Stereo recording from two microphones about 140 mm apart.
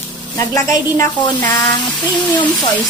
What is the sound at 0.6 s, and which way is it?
Speech, 25° left (ahead or behind).